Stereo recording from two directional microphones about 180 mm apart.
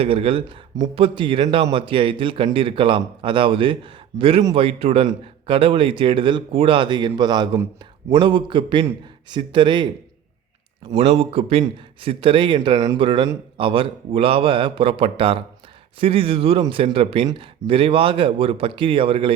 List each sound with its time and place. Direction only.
0.0 s speech: 30° right (ahead or behind)
10.9 s speech: 35° right (ahead or behind)